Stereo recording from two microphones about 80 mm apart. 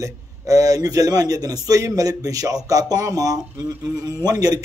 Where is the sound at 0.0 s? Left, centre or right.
Right.